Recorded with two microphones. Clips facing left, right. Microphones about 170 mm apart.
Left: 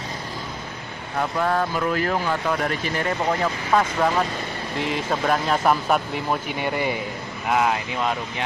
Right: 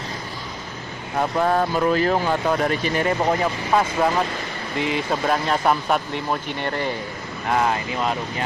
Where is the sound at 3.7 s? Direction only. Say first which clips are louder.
Even; 5° right (ahead or behind).